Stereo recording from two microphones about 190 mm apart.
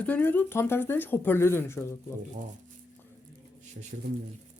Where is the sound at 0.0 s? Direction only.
10° left (ahead or behind).